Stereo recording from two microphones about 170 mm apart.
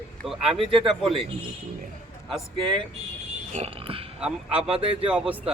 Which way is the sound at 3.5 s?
35° right (ahead or behind).